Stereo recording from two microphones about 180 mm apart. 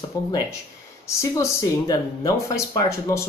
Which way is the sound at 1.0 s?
20° left (ahead or behind).